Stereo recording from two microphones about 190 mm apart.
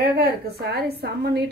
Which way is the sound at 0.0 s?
55° right (ahead or behind).